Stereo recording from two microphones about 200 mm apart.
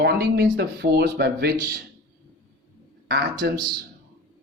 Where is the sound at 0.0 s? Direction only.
50° right (ahead or behind).